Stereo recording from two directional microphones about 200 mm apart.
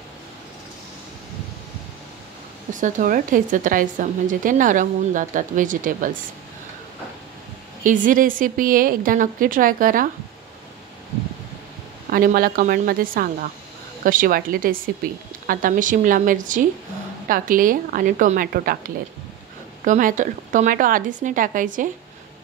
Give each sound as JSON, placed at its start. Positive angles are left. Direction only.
{"t": 2.7, "sound": "speech", "side_deg": -40}
{"t": 7.8, "sound": "a woman's voice", "side_deg": -40}
{"t": 12.1, "sound": "a woman's voice", "side_deg": -45}
{"t": 19.8, "sound": "speech", "side_deg": -40}